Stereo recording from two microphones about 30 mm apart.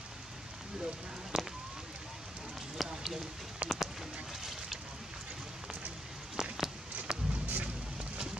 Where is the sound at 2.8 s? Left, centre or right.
Centre.